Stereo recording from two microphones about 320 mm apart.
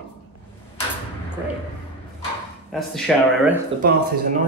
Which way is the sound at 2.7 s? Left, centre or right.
Centre.